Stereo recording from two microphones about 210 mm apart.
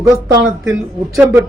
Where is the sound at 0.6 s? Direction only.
5° right (ahead or behind).